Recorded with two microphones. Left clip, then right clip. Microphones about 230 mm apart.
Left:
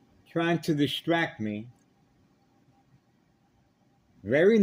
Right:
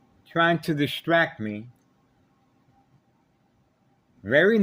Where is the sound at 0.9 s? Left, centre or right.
Right.